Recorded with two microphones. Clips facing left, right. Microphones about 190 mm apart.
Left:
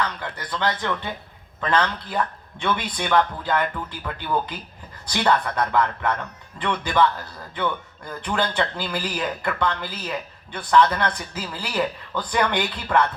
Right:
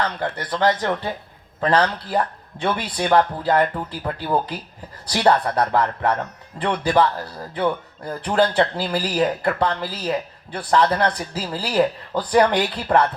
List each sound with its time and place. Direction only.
0.0 s a man's voice: 40° right (ahead or behind)